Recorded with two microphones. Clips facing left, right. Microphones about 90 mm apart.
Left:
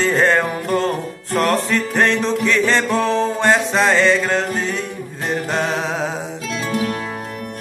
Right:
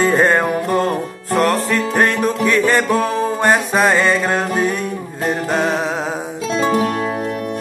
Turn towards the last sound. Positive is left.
turn(degrees=-40)  # may be behind; listen again after turning